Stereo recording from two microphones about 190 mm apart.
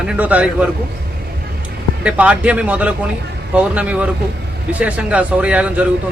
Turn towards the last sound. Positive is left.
turn(degrees=-5)  # may be behind; listen again after turning